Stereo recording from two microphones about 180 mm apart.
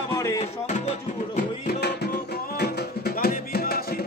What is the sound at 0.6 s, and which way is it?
Music, 40° left (ahead or behind).